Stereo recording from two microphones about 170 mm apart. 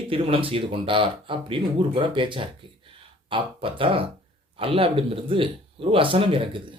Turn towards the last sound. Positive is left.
turn(degrees=-30)  # may be behind; listen again after turning